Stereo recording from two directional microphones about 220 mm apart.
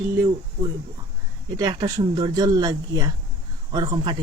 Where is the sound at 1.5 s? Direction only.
20° right (ahead or behind).